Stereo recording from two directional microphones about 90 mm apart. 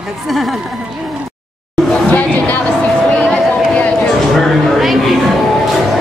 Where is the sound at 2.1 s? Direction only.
20° left (ahead or behind).